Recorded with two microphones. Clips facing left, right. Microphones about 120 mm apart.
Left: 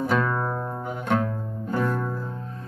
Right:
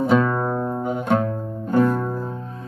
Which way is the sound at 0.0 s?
20° right (ahead or behind).